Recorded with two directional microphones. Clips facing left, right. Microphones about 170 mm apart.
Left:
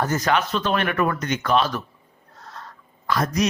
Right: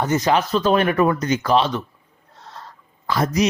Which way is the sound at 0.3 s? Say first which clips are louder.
Right 5 dB; 35° right (ahead or behind).